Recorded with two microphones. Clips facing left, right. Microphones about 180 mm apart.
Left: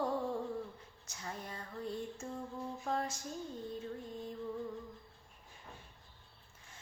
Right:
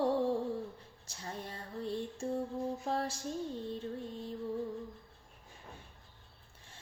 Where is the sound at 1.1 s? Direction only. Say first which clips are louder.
Right 2 dB; 30° right (ahead or behind).